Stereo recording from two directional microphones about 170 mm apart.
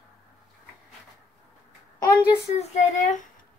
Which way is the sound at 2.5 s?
45° left (ahead or behind).